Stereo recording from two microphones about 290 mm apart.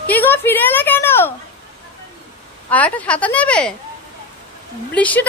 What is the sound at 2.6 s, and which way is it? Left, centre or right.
Child singing, centre.